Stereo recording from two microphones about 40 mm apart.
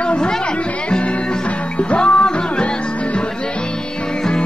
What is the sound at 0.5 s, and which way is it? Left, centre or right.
Music, left.